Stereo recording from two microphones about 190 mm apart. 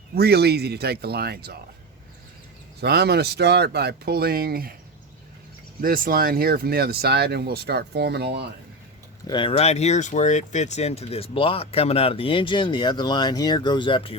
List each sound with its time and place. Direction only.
0.1 s speech: 60° right (ahead or behind)
2.8 s speech: 60° right (ahead or behind)
5.8 s speech: 50° right (ahead or behind)
9.2 s speech: 25° left (ahead or behind)